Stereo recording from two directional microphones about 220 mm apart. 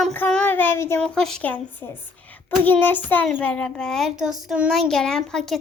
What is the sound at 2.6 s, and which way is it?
Child singing, 10° left (ahead or behind).